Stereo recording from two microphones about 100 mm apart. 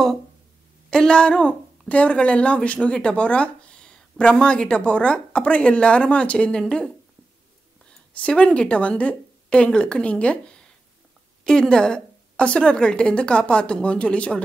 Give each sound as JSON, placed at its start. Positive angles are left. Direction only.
{"t": 0.8, "sound": "speech", "side_deg": 10}
{"t": 8.1, "sound": "speech", "side_deg": 10}